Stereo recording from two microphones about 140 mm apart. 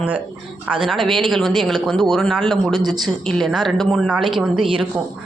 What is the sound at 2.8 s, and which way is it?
Speech, 30° right (ahead or behind).